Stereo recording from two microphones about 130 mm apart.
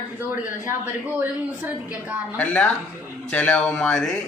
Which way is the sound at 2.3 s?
10° left (ahead or behind).